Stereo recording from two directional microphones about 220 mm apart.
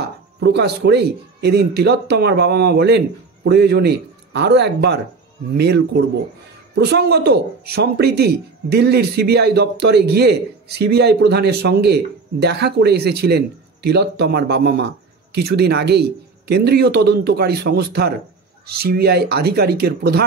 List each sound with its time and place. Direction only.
0.4 s speech: 50° right (ahead or behind)